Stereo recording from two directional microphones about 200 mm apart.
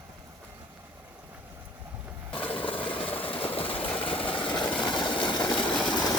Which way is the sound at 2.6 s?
25° left (ahead or behind).